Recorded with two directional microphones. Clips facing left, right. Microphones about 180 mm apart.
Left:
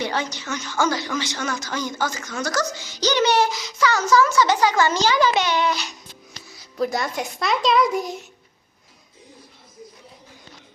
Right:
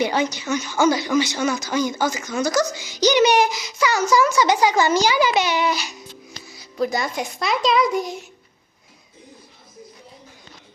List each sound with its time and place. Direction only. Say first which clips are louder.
0.0 s a child's voice: right 5 dB; 10° right (ahead or behind)